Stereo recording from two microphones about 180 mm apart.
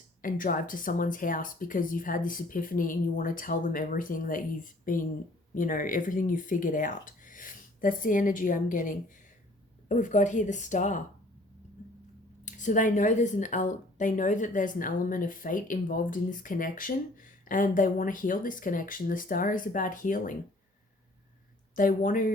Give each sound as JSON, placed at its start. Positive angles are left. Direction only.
{"t": 0.2, "sound": "speech", "side_deg": 50}
{"t": 12.5, "sound": "speech", "side_deg": 45}
{"t": 21.8, "sound": "speech", "side_deg": 50}